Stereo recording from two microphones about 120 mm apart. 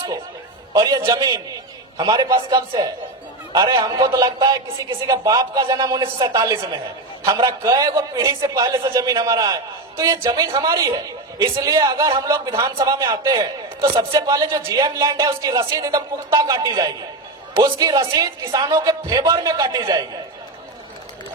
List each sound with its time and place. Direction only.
0.7 s a man's voice: 30° right (ahead or behind)